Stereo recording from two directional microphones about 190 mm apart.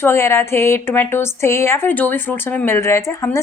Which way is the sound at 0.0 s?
15° left (ahead or behind).